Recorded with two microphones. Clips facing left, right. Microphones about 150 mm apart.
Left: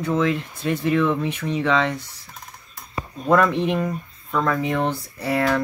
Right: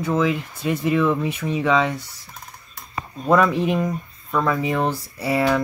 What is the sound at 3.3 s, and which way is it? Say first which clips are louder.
Speech: right 1 dB; 5° right (ahead or behind).